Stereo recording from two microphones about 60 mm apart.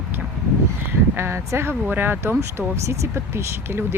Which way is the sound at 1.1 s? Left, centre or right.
Right.